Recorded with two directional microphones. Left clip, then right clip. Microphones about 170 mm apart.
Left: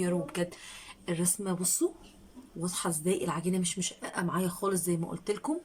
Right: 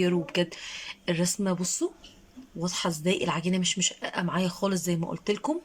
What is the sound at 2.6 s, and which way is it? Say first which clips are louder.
Speech: right 4 dB; 5° right (ahead or behind).